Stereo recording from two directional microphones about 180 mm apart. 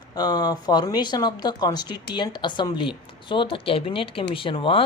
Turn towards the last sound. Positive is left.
turn(degrees=30)  # may be behind; listen again after turning